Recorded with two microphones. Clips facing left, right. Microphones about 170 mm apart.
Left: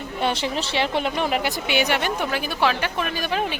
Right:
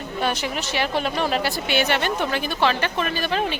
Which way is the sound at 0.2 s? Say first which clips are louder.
Left 1 dB; 25° left (ahead or behind).